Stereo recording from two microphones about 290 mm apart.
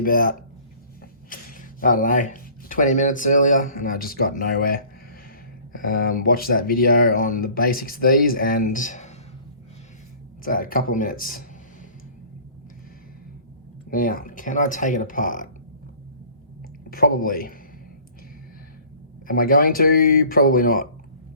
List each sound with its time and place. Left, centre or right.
0.0 s speech: left
10.4 s speech: left
13.9 s speech: left
16.9 s speech: left
19.3 s speech: left